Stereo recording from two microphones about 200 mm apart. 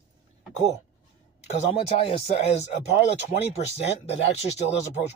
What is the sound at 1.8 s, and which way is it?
Speech, 30° left (ahead or behind).